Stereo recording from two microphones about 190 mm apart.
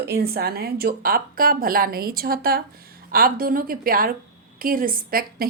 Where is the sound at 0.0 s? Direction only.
55° right (ahead or behind).